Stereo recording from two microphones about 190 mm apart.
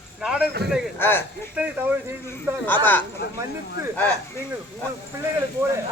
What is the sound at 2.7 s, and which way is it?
Speech, 10° left (ahead or behind).